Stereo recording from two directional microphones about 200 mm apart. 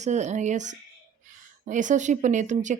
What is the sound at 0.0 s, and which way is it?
A woman's voice, 35° right (ahead or behind).